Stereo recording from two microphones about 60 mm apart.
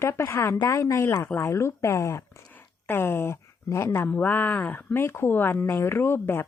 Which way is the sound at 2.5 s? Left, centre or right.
Left.